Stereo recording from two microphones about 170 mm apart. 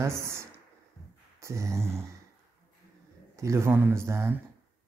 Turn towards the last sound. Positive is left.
turn(degrees=-15)  # may be behind; listen again after turning